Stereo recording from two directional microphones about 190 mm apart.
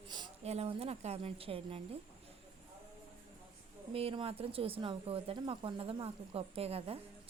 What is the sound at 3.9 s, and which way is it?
A woman's voice, 30° right (ahead or behind).